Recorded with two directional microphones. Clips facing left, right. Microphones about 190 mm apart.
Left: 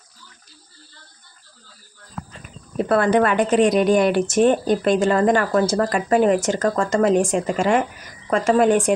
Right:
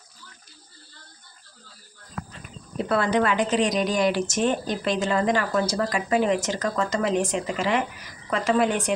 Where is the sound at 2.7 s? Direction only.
50° left (ahead or behind).